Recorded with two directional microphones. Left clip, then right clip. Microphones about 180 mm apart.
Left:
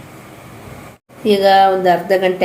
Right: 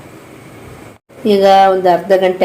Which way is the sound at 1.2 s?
10° right (ahead or behind).